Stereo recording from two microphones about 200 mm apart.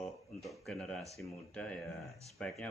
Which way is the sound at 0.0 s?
Centre (ahead or behind).